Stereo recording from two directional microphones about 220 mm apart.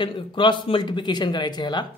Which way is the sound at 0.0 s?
20° left (ahead or behind).